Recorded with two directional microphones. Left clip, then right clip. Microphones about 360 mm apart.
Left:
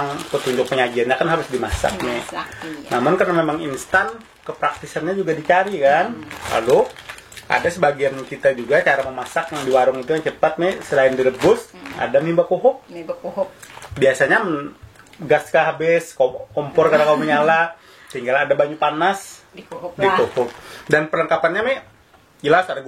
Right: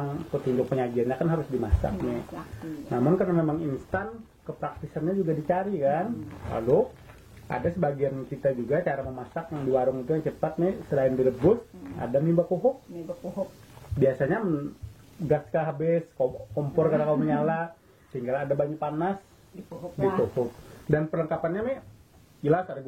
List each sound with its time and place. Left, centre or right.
0.0 s speech: centre
12.4 s speech: centre
13.9 s speech: centre
16.2 s speech: left
16.7 s speech: centre